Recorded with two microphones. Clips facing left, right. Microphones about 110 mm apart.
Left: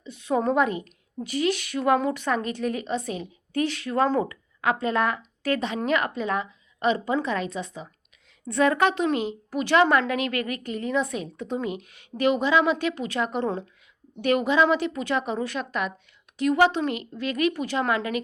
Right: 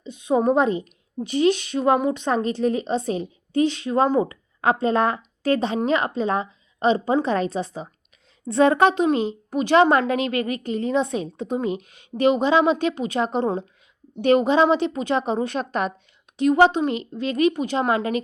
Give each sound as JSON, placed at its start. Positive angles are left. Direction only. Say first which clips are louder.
{"t": 0.0, "sound": "a woman's voice", "louder": "right 4 dB", "side_deg": -20}
{"t": 4.6, "sound": "a woman's voice", "louder": "right 4 dB", "side_deg": -30}